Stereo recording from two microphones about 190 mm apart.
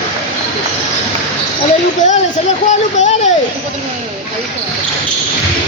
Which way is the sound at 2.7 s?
40° left (ahead or behind).